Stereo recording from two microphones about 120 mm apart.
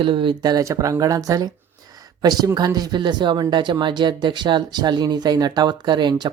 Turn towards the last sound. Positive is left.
turn(degrees=-40)  # may be behind; listen again after turning